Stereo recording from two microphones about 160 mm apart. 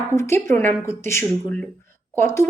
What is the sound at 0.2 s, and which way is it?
Speech, 15° left (ahead or behind).